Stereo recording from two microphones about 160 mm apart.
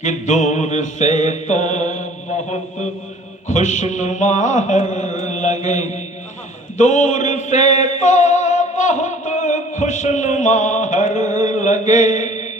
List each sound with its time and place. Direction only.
0.0 s music: 50° left (ahead or behind)
3.5 s music: 50° left (ahead or behind)